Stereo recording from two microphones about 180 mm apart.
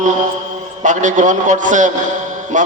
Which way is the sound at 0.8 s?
45° right (ahead or behind).